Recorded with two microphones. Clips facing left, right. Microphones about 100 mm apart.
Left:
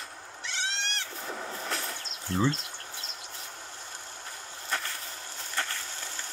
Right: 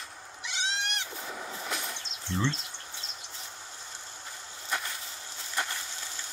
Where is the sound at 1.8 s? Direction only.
20° right (ahead or behind).